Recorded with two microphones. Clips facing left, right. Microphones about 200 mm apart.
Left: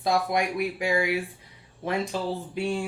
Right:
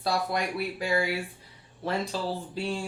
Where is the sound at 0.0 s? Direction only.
15° left (ahead or behind).